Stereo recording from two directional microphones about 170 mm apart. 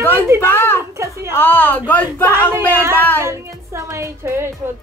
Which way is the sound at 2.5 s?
15° right (ahead or behind).